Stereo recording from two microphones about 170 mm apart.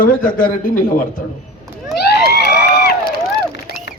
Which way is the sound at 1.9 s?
70° left (ahead or behind).